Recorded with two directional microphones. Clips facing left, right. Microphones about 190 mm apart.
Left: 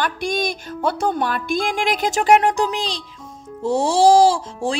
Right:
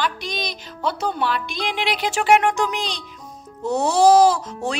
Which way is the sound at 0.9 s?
50° left (ahead or behind).